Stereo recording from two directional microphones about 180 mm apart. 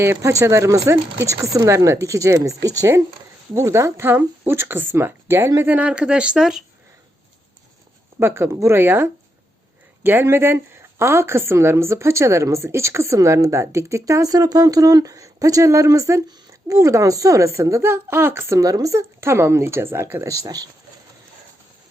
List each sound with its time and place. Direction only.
0.0 s speech: 15° right (ahead or behind)
8.2 s speech: 15° right (ahead or behind)